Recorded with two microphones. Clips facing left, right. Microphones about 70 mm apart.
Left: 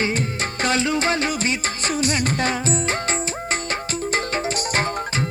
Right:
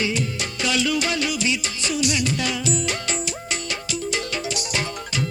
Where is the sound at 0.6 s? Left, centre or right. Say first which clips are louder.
Left 2 dB; left.